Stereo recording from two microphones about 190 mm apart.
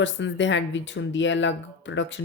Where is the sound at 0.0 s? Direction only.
75° left (ahead or behind).